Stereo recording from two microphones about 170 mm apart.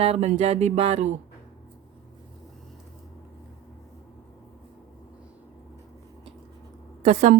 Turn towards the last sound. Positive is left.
turn(degrees=-45)  # may be behind; listen again after turning